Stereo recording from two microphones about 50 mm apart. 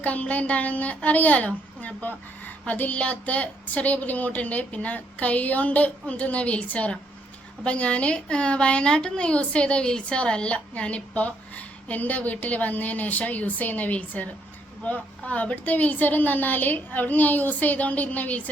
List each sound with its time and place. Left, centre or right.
0.0 s a woman's voice: left